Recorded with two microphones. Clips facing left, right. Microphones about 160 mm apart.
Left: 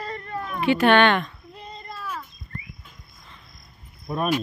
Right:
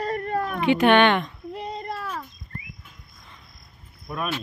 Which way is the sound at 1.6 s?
70° right (ahead or behind).